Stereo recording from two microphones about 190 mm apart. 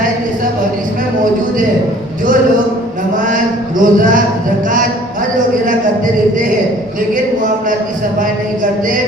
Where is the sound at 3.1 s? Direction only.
45° right (ahead or behind).